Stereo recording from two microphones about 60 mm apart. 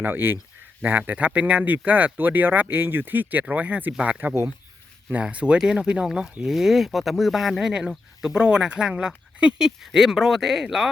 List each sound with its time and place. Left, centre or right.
0.0 s speech: right
5.2 s speech: centre